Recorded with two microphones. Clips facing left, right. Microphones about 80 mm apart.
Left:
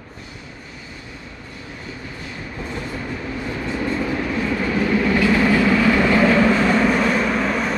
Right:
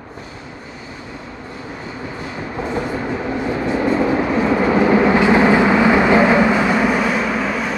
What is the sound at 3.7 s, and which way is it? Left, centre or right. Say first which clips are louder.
Vehicle: right 6 dB; right.